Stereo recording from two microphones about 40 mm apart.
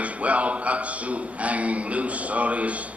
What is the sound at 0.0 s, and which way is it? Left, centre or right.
A man's voice, right.